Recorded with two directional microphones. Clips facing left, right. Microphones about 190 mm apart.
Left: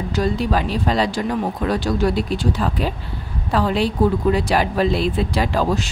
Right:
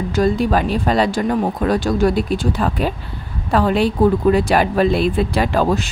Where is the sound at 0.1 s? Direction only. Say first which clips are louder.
Right 4 dB; 50° right (ahead or behind).